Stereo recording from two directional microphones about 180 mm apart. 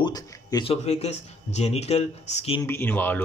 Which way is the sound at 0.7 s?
35° left (ahead or behind).